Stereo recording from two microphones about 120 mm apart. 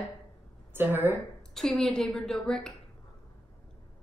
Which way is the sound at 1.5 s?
5° left (ahead or behind).